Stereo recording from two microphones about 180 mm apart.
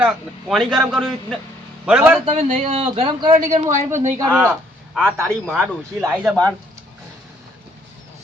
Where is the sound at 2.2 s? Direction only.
40° right (ahead or behind).